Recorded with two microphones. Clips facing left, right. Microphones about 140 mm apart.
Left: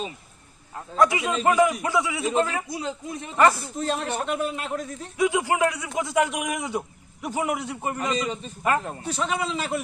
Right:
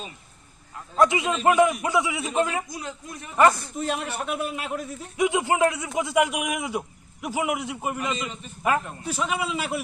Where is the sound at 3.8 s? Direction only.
10° right (ahead or behind).